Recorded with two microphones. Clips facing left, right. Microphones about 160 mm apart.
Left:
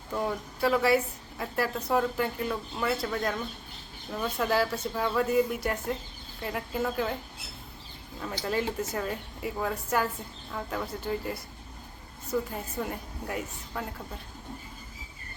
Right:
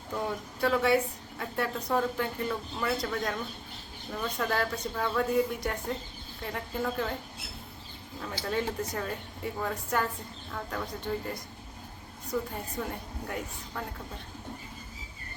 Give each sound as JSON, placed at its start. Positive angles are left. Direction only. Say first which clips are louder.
{"t": 0.3, "sound": "a woman's voice", "louder": "left 1 dB", "side_deg": 0}
{"t": 8.4, "sound": "a woman's voice", "louder": "left 1 dB", "side_deg": 5}